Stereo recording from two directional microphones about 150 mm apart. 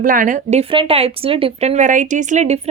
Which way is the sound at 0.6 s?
35° right (ahead or behind).